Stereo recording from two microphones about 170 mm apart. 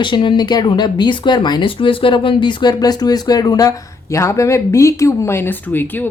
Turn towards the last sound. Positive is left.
turn(degrees=10)  # may be behind; listen again after turning